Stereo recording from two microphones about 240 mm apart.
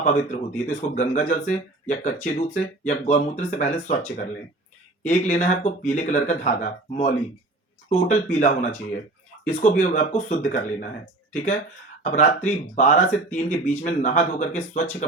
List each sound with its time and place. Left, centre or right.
0.0 s speech: left
12.0 s speech: left